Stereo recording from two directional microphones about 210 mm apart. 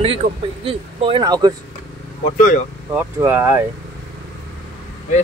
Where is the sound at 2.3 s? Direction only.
40° left (ahead or behind).